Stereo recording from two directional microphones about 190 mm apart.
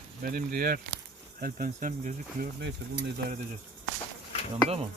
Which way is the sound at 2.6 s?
60° right (ahead or behind).